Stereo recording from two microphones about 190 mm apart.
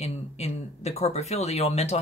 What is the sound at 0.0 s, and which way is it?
Speech, 35° left (ahead or behind).